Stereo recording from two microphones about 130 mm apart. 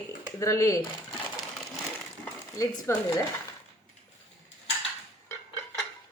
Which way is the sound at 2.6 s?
25° left (ahead or behind).